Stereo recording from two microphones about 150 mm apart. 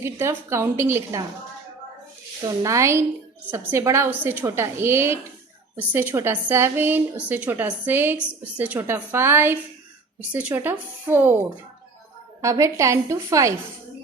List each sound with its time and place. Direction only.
0.0 s a woman's voice: 20° right (ahead or behind)
2.4 s a woman's voice: 20° right (ahead or behind)